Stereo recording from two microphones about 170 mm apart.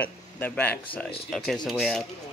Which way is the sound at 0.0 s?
10° left (ahead or behind).